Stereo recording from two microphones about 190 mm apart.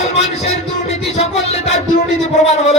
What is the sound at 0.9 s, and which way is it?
Speech, 35° left (ahead or behind).